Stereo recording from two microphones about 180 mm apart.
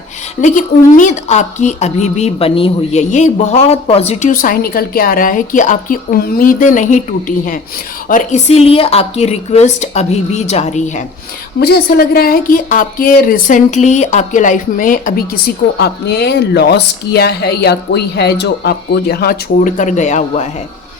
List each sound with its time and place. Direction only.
0.4 s speech: 45° left (ahead or behind)
11.6 s speech: 60° left (ahead or behind)
15.8 s speech: 65° left (ahead or behind); by 20.5 s 40° left (ahead or behind)